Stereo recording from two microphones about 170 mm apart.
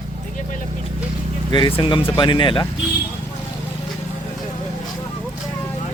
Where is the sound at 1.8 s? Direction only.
30° left (ahead or behind).